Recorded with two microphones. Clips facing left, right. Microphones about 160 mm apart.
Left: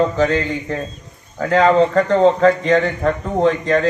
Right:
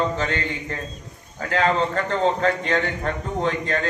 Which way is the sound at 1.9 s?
35° left (ahead or behind).